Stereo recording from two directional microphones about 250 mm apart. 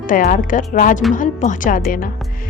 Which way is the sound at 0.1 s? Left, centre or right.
Left.